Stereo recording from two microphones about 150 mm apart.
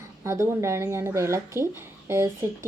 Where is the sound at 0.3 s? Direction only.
20° right (ahead or behind).